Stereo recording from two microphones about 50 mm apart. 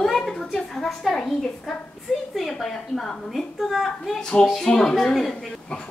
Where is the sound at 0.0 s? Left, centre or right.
Centre.